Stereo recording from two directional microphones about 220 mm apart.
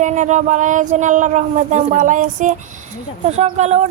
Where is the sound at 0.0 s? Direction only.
35° right (ahead or behind).